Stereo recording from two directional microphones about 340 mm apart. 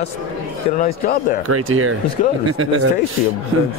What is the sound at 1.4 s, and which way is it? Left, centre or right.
Speech, right.